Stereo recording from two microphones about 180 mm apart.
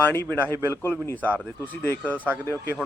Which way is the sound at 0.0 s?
10° left (ahead or behind).